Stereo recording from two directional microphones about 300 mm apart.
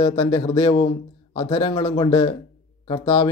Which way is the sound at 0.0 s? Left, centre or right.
Centre.